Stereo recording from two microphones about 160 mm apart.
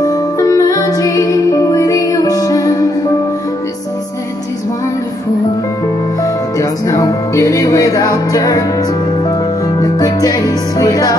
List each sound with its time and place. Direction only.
0.0 s music: 20° left (ahead or behind)
6.2 s music: 20° left (ahead or behind)
9.8 s music: 25° left (ahead or behind)